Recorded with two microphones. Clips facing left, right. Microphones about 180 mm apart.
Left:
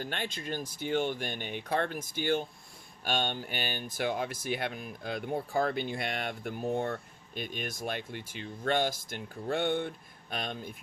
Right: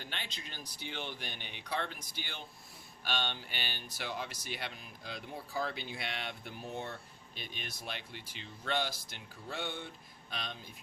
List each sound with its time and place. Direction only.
0.0 s speech: 50° left (ahead or behind)